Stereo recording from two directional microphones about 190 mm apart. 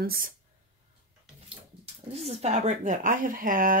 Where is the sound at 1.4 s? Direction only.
35° right (ahead or behind).